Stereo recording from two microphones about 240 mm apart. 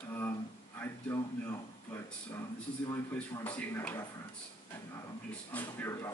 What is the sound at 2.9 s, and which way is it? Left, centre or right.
A man's voice, centre.